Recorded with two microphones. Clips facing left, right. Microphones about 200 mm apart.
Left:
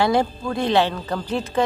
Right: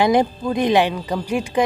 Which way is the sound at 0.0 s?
15° right (ahead or behind).